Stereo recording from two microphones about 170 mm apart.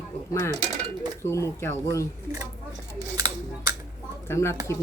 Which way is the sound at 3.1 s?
20° right (ahead or behind).